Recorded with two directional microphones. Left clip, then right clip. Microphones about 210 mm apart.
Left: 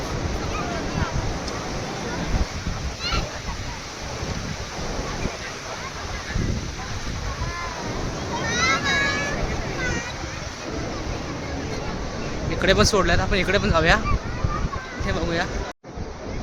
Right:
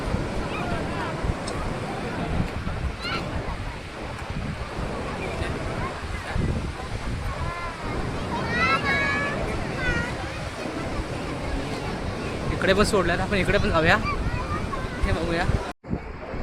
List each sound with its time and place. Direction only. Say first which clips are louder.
8.5 s vehicle: left 1 dB; 40° left (ahead or behind)
12.6 s speech: left 2 dB; 15° left (ahead or behind)
15.0 s speech: left 2 dB; 10° left (ahead or behind)